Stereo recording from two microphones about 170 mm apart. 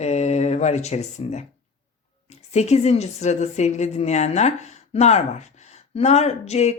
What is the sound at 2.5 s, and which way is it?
A woman's voice, 40° left (ahead or behind).